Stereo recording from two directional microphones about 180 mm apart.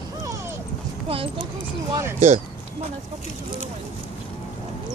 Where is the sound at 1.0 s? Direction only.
30° right (ahead or behind).